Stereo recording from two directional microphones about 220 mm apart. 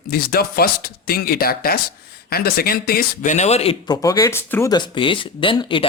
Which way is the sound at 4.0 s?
15° left (ahead or behind).